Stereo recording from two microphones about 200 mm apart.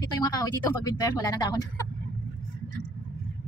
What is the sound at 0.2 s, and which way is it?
Speech, 20° left (ahead or behind).